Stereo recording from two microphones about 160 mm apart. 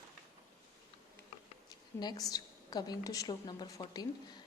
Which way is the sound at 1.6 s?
25° left (ahead or behind).